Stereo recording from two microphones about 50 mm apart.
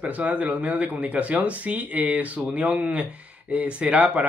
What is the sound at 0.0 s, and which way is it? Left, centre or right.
Speech, right.